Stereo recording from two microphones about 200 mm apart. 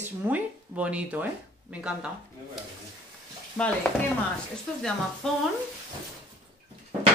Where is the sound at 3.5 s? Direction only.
5° left (ahead or behind).